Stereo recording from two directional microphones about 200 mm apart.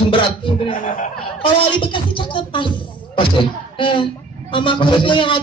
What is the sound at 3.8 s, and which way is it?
A man's voice, 25° left (ahead or behind).